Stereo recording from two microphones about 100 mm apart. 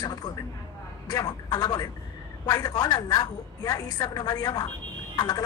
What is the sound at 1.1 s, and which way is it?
A woman's voice, 40° left (ahead or behind).